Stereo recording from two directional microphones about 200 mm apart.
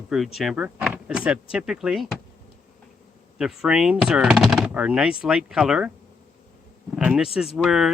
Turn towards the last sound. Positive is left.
turn(degrees=0)  # may be behind; listen again after turning